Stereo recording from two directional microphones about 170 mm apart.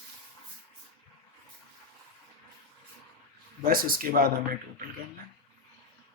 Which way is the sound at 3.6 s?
60° right (ahead or behind).